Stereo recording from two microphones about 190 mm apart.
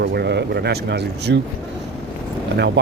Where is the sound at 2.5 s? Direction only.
65° right (ahead or behind).